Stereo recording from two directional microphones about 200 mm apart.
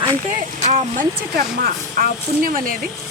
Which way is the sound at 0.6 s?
35° right (ahead or behind).